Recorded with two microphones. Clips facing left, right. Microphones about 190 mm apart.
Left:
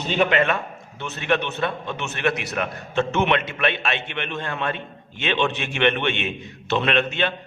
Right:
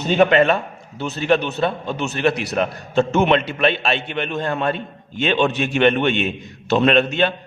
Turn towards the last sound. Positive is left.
turn(degrees=-40)  # may be behind; listen again after turning